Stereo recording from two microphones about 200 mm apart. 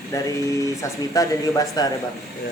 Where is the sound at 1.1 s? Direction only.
15° left (ahead or behind).